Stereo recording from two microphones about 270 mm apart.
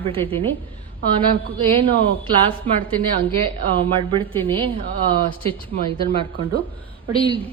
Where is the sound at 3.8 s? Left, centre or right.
Centre.